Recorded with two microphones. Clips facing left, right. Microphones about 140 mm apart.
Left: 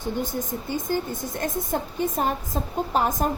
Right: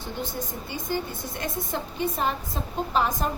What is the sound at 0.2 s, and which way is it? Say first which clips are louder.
A woman's voice: left 4 dB; 45° left (ahead or behind).